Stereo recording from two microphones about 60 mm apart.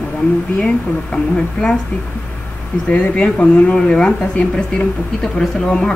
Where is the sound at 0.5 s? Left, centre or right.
Centre.